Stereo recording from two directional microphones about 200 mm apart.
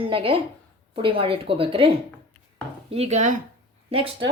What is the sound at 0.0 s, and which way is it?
A woman's voice, 25° right (ahead or behind).